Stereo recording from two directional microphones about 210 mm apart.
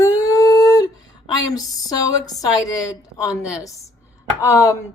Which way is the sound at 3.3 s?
5° right (ahead or behind).